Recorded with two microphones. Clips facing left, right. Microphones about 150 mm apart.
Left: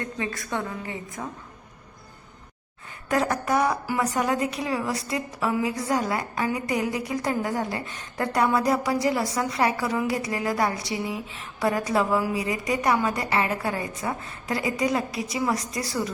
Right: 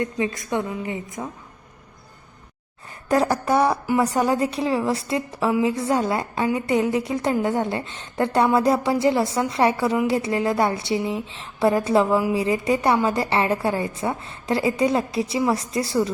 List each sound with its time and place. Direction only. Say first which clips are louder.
0.0 s a woman's voice: right 6 dB; 20° right (ahead or behind)
3.1 s a woman's voice: right 4 dB; 35° right (ahead or behind)